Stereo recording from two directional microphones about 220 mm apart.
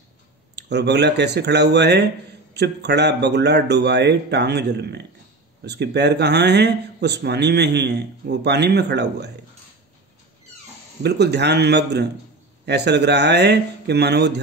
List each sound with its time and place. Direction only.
0.6 s a man's voice: 50° right (ahead or behind)
11.0 s a man's voice: 50° right (ahead or behind)